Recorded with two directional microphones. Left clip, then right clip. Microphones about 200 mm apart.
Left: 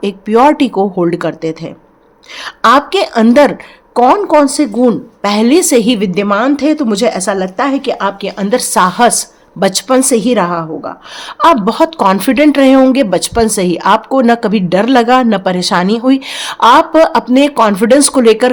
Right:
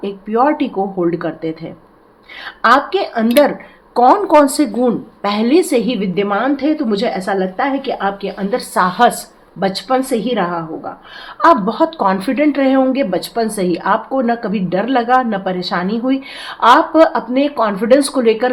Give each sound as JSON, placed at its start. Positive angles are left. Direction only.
{"t": 0.0, "sound": "a woman's voice", "side_deg": 55}
{"t": 3.9, "sound": "a woman's voice", "side_deg": 30}
{"t": 11.3, "sound": "speech", "side_deg": 45}